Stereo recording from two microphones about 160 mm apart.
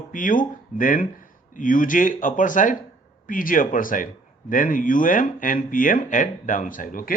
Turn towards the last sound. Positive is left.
turn(degrees=60)  # may be behind; listen again after turning